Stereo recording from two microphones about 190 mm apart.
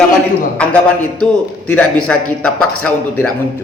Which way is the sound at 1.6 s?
5° left (ahead or behind).